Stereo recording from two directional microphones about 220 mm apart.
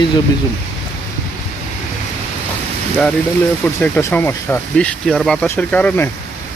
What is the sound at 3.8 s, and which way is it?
Speech, 10° left (ahead or behind).